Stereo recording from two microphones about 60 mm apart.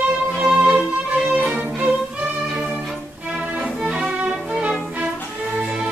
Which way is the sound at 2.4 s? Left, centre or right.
Centre.